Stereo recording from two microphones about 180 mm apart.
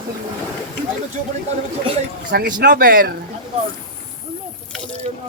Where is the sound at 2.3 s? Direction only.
55° right (ahead or behind).